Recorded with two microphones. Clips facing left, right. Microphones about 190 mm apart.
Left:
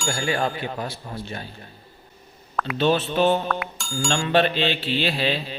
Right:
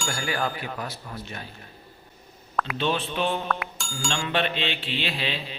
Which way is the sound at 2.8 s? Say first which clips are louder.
Left 7 dB; 40° left (ahead or behind).